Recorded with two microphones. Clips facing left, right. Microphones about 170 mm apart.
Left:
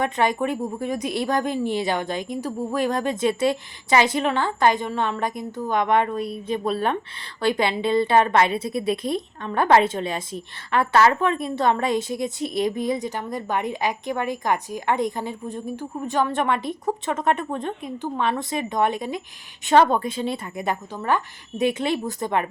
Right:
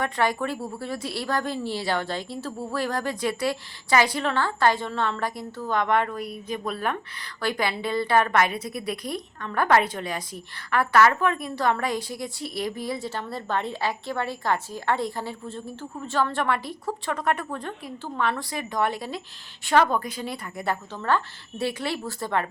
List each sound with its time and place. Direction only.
0.0 s a woman's voice: 20° left (ahead or behind)